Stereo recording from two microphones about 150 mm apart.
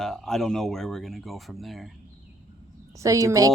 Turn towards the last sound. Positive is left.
turn(degrees=-20)  # may be behind; listen again after turning